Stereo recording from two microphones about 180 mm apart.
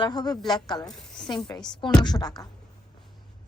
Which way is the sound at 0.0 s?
25° left (ahead or behind).